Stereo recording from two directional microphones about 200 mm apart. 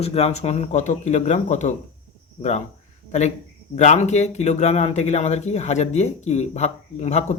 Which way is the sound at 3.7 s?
35° left (ahead or behind).